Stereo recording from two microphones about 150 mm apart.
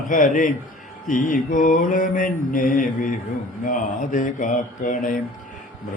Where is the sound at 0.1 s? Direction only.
60° left (ahead or behind).